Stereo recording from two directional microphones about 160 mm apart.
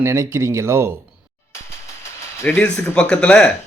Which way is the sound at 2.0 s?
15° left (ahead or behind).